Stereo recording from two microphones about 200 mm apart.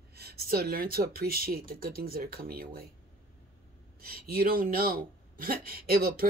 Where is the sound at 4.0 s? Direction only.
50° right (ahead or behind).